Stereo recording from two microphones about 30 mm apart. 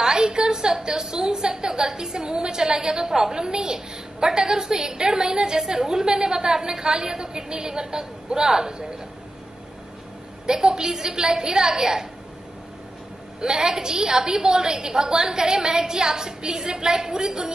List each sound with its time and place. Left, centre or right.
0.0 s a woman's voice: right
10.4 s a woman's voice: right
13.4 s a woman's voice: right